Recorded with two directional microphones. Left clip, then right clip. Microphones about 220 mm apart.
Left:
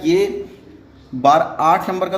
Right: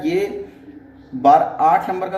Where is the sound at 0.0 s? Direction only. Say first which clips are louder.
Left 4 dB; 35° left (ahead or behind).